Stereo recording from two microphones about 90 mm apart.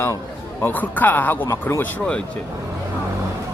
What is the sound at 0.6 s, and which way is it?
Speech, 20° left (ahead or behind).